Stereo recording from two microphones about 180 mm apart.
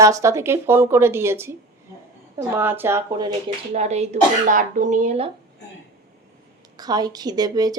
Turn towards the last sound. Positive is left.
turn(degrees=-20)  # may be behind; listen again after turning